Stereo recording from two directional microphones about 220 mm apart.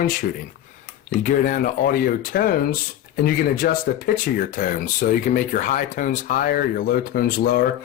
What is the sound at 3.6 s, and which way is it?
Speech, 45° left (ahead or behind).